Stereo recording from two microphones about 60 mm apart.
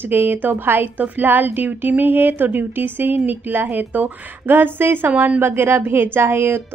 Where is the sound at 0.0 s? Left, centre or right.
Right.